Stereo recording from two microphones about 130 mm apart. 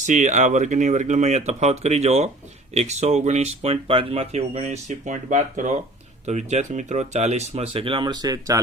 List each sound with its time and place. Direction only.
0.0 s speech: 70° right (ahead or behind); by 8.6 s 25° right (ahead or behind)